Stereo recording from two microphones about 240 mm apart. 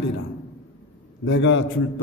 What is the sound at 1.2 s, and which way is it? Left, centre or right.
Speech, left.